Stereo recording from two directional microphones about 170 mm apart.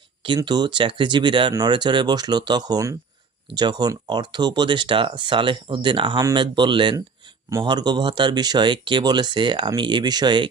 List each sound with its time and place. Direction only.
0.2 s speech: 25° right (ahead or behind)